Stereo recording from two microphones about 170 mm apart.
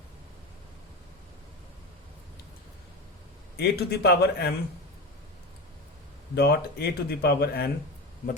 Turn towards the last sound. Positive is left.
turn(degrees=70)  # may be behind; listen again after turning